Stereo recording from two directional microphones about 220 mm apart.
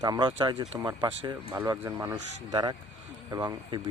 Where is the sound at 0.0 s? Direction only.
20° right (ahead or behind).